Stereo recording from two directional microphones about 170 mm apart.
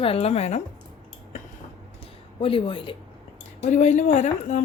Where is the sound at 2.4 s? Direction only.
30° left (ahead or behind).